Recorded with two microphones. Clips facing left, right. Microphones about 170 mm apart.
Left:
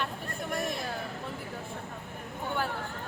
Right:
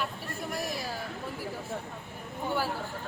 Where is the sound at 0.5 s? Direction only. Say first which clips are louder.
Left 2 dB; 5° right (ahead or behind).